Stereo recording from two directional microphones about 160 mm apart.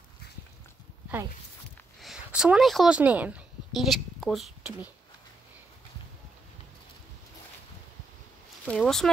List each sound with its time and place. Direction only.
2.0 s speech: 5° right (ahead or behind)
8.6 s speech: 5° left (ahead or behind)